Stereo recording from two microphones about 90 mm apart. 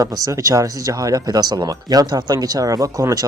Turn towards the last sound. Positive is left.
turn(degrees=-40)  # may be behind; listen again after turning